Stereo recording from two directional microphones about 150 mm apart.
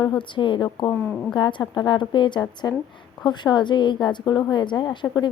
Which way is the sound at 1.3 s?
30° left (ahead or behind).